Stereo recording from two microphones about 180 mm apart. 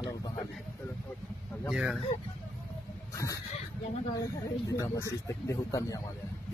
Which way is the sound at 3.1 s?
15° left (ahead or behind).